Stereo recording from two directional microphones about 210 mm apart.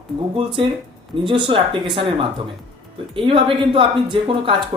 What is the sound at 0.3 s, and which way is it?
Speech, 25° right (ahead or behind).